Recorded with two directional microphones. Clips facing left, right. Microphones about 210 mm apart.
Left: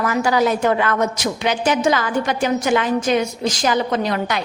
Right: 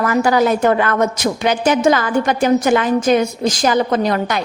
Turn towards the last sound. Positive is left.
turn(degrees=-45)  # may be behind; listen again after turning